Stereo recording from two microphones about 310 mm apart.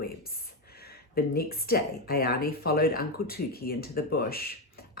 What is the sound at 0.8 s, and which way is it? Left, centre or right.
Speech, left.